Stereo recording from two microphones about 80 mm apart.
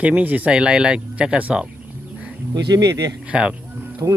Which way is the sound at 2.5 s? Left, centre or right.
Right.